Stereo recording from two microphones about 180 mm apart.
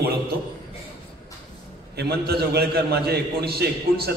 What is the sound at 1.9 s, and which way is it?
A man's voice, 60° right (ahead or behind).